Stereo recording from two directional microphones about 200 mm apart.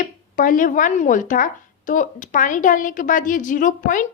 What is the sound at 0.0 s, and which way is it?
A woman's voice, 40° left (ahead or behind).